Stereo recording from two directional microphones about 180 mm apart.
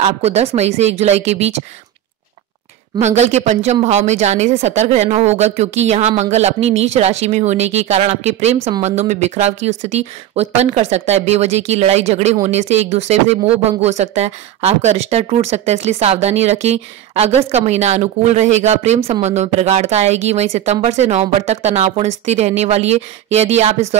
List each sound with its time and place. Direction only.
0.0 s speech: 35° right (ahead or behind)
3.0 s speech: 40° right (ahead or behind)